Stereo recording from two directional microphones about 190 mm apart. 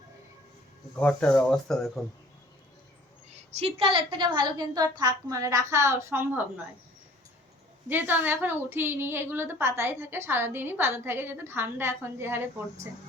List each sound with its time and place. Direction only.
0.9 s speech: 5° left (ahead or behind)
3.3 s a woman's voice: 35° right (ahead or behind); by 6.4 s 10° right (ahead or behind)
7.9 s a woman's voice: 10° right (ahead or behind)